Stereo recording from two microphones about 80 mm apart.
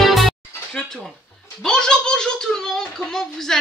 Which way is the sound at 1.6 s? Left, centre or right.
Centre.